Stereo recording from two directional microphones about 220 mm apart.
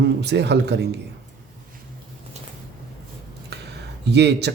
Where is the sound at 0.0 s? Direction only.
50° right (ahead or behind).